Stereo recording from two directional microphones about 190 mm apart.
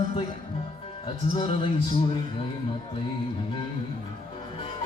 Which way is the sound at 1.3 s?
30° left (ahead or behind).